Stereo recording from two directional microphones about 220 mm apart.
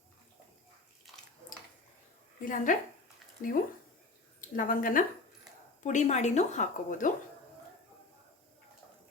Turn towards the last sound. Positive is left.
turn(degrees=35)  # may be behind; listen again after turning